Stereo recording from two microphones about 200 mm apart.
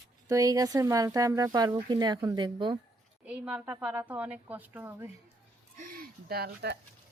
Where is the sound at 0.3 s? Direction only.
15° right (ahead or behind).